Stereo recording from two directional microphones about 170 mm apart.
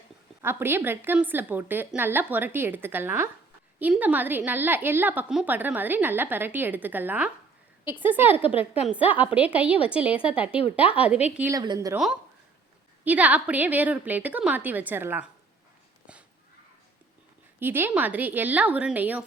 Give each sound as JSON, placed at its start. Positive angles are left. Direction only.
{"t": 0.4, "sound": "a woman's voice", "side_deg": -15}
{"t": 11.5, "sound": "a woman's voice", "side_deg": -25}
{"t": 13.1, "sound": "a woman's voice", "side_deg": -10}
{"t": 17.6, "sound": "a woman's voice", "side_deg": -10}